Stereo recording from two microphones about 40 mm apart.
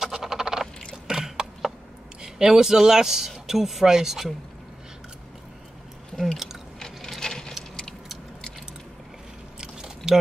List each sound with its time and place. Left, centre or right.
0.0 s frog: centre
1.0 s a sound: centre
2.2 s speech: centre
6.3 s chewing: centre
6.8 s a sound: centre
9.6 s biting: centre